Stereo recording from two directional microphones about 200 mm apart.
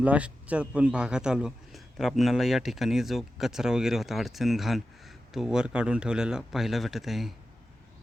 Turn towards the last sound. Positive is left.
turn(degrees=0)  # may be behind; listen again after turning